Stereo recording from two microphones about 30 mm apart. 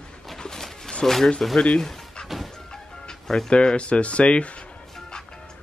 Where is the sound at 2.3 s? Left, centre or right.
Centre.